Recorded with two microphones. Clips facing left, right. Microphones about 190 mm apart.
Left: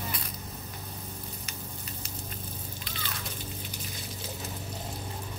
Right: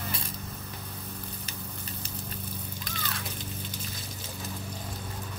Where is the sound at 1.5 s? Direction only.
30° right (ahead or behind).